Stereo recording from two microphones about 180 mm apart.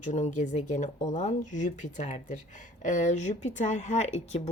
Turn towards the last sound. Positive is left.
turn(degrees=40)  # may be behind; listen again after turning